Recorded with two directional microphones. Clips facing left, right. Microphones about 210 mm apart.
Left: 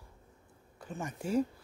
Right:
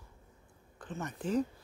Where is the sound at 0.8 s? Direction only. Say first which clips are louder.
Even; 10° left (ahead or behind).